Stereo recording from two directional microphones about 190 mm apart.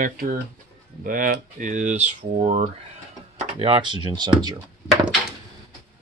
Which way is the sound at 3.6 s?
25° right (ahead or behind).